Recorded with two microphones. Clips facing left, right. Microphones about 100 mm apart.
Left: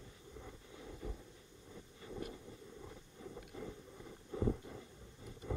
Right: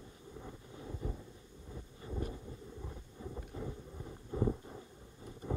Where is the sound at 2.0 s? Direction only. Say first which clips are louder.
Right 4 dB; 30° right (ahead or behind).